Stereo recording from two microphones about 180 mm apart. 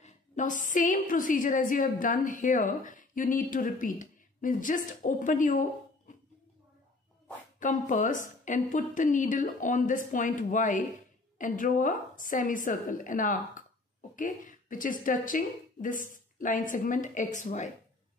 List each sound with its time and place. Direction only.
0.0 s a woman's voice: 45° left (ahead or behind)
7.6 s a woman's voice: 45° left (ahead or behind)